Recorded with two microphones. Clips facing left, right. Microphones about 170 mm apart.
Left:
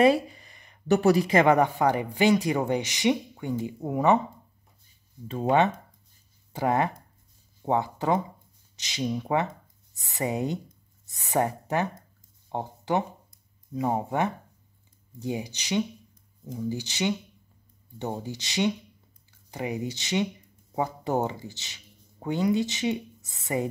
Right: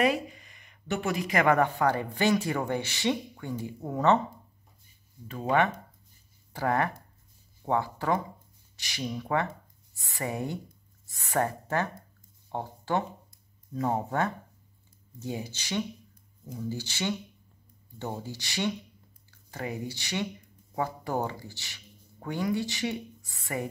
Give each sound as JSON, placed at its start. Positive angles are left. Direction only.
{"t": 0.0, "sound": "speech", "side_deg": 30}
{"t": 5.3, "sound": "speech", "side_deg": 25}
{"t": 12.4, "sound": "a sound", "side_deg": 15}
{"t": 13.7, "sound": "speech", "side_deg": 15}